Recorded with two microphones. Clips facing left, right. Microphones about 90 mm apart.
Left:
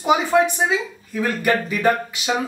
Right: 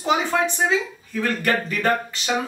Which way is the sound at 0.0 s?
10° left (ahead or behind).